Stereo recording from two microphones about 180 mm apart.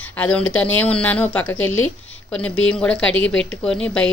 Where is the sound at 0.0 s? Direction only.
5° left (ahead or behind).